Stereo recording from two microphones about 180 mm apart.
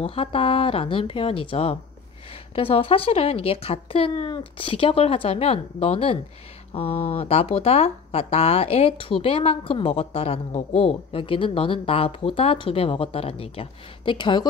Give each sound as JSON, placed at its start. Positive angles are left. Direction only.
{"t": 0.0, "sound": "a woman's voice", "side_deg": 30}